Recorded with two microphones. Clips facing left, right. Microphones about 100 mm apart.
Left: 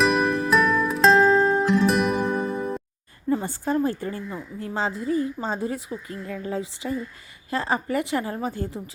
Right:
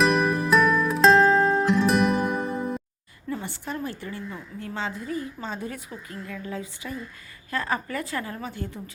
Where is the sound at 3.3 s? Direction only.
40° left (ahead or behind).